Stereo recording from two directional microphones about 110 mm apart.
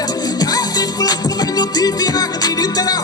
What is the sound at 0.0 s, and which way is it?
Music, 35° left (ahead or behind).